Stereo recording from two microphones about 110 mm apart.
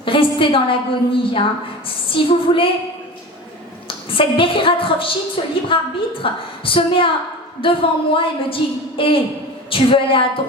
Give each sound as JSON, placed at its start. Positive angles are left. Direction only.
{"t": 0.0, "sound": "a woman's voice", "side_deg": 50}
{"t": 3.8, "sound": "a woman's voice", "side_deg": 55}